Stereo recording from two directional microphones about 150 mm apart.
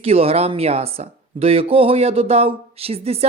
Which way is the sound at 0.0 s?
40° right (ahead or behind).